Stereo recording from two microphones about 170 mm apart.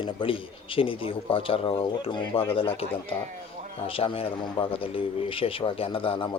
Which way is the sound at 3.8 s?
35° left (ahead or behind).